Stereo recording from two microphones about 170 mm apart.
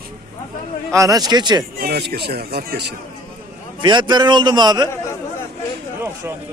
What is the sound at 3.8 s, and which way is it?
A man's voice, 25° right (ahead or behind).